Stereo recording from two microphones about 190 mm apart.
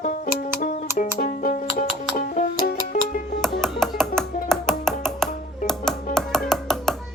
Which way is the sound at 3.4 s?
Centre (ahead or behind).